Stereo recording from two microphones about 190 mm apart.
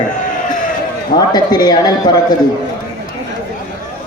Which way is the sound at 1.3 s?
20° left (ahead or behind).